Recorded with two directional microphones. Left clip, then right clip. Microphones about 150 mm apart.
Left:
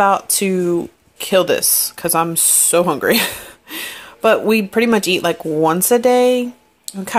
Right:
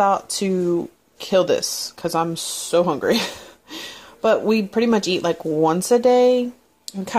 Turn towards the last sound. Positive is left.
turn(degrees=-10)  # may be behind; listen again after turning